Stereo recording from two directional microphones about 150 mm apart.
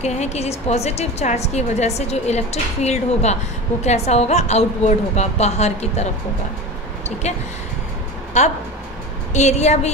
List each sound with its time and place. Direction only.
0.0 s a woman's voice: 45° left (ahead or behind)
7.2 s a woman's voice: 50° left (ahead or behind)